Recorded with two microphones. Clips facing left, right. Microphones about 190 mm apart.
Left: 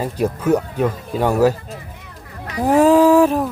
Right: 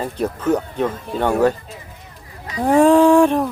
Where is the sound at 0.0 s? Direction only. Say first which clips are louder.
Left 2 dB; 10° left (ahead or behind).